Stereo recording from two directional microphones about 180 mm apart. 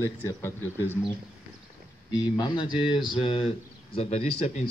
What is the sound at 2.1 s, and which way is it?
Speech, 25° left (ahead or behind).